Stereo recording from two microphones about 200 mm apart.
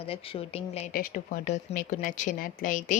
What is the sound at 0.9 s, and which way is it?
Speech, 45° left (ahead or behind).